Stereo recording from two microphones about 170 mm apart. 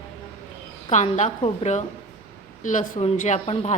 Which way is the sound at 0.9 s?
45° left (ahead or behind).